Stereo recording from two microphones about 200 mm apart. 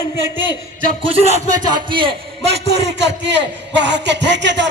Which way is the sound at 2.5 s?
55° right (ahead or behind).